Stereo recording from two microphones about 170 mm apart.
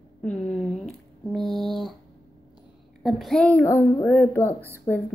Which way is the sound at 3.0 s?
Centre (ahead or behind).